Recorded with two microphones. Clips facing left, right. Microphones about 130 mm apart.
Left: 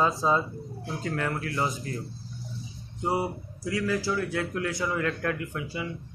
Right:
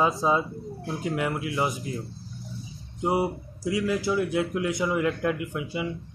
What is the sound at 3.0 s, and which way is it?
A man's voice, 25° right (ahead or behind).